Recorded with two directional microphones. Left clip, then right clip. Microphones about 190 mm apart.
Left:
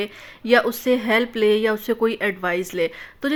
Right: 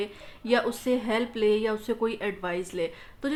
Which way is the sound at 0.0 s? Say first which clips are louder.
Left 5 dB; 25° left (ahead or behind).